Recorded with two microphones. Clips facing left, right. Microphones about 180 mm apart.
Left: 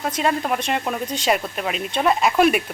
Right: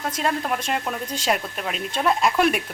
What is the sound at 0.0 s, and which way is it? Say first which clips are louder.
Speech: left 3 dB; 5° left (ahead or behind).